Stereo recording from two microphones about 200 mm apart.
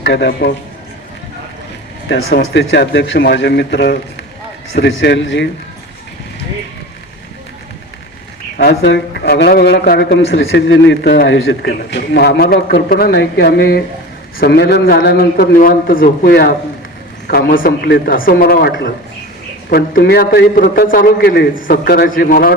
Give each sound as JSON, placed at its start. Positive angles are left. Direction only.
{"t": 0.0, "sound": "speech", "side_deg": 55}
{"t": 2.0, "sound": "speech", "side_deg": 55}
{"t": 8.5, "sound": "a man's voice", "side_deg": 55}